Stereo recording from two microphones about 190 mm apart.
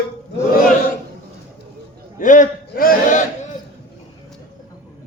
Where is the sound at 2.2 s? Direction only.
45° left (ahead or behind).